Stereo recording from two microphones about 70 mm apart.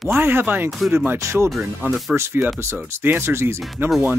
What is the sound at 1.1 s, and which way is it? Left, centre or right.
Speech, right.